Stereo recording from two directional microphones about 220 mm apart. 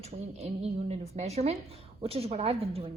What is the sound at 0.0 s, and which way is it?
A woman's voice, 30° right (ahead or behind).